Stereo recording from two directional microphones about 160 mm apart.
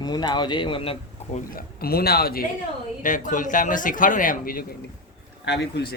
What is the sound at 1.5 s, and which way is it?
Speech, 70° left (ahead or behind).